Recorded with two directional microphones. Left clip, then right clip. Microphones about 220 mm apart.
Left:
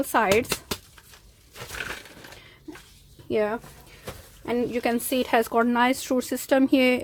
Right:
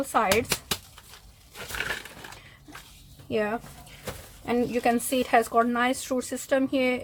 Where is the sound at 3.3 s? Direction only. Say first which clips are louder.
Left 3 dB; 30° left (ahead or behind).